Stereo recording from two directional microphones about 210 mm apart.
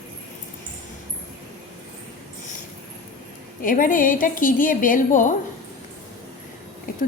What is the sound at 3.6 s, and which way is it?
A woman's voice, 40° left (ahead or behind).